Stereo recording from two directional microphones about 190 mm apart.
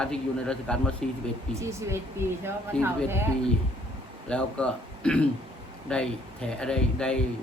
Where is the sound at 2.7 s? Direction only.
5° left (ahead or behind).